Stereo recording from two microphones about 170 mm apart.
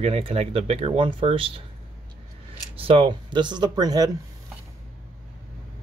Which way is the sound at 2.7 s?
35° right (ahead or behind).